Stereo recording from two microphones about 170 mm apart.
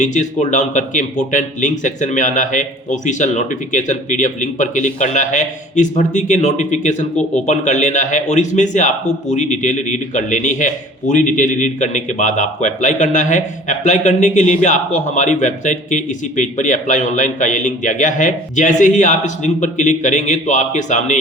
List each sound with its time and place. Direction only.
0.0 s a man's voice: 45° left (ahead or behind)